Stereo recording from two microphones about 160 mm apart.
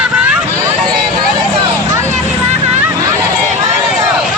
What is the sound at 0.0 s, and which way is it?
Hubbub, 5° right (ahead or behind).